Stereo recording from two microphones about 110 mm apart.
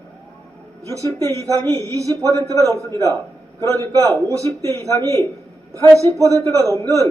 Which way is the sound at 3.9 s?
35° right (ahead or behind).